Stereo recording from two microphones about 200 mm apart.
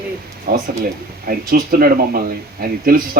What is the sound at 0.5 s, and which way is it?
Speech, 50° right (ahead or behind).